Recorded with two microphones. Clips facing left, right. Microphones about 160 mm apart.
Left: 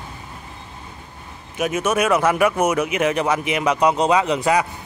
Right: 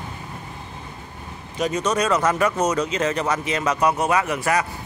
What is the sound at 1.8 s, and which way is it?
Speech, 10° left (ahead or behind).